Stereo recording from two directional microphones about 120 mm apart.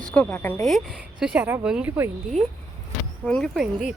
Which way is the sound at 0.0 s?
10° left (ahead or behind).